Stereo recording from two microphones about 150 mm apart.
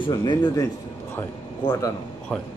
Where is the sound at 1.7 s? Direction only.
25° left (ahead or behind).